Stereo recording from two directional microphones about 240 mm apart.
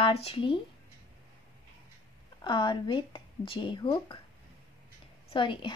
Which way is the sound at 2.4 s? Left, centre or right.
Centre.